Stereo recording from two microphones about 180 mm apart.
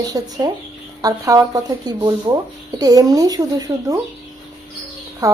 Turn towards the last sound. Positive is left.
turn(degrees=-20)  # may be behind; listen again after turning